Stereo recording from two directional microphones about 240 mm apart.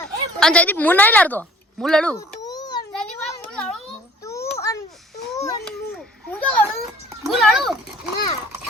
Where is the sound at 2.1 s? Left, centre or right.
Centre.